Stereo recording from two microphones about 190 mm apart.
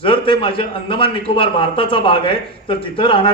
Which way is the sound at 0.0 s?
25° left (ahead or behind).